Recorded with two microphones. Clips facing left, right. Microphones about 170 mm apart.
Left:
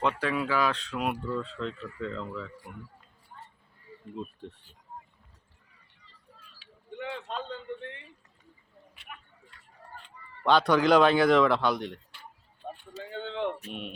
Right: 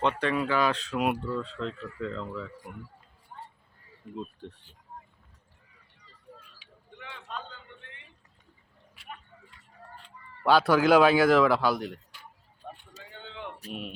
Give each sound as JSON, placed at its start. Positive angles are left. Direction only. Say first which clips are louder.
{"t": 0.0, "sound": "speech", "louder": "right 1 dB", "side_deg": 5}
{"t": 4.2, "sound": "speech", "louder": "even", "side_deg": 0}
{"t": 7.0, "sound": "a sound", "louder": "left 6 dB", "side_deg": 35}
{"t": 10.4, "sound": "speech", "louder": "right 1 dB", "side_deg": -5}
{"t": 12.6, "sound": "vehicle", "louder": "left 3 dB", "side_deg": 25}
{"t": 13.6, "sound": "speech", "louder": "right 1 dB", "side_deg": -35}